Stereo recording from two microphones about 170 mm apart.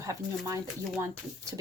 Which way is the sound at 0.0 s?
15° right (ahead or behind).